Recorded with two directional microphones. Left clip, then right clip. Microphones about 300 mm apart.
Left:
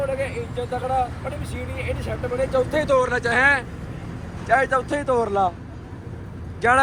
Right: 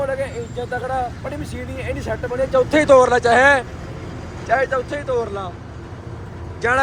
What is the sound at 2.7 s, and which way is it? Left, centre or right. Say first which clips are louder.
Speech: right 12 dB; right.